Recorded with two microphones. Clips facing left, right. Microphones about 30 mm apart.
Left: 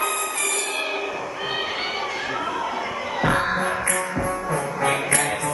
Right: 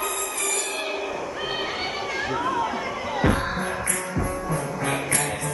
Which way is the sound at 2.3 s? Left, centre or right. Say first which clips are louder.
Right 4 dB; centre.